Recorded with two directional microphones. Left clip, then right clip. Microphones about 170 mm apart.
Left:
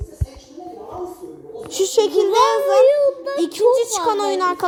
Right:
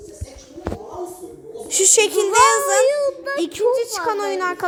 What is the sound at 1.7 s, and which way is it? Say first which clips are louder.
Speech: even; 10° right (ahead or behind).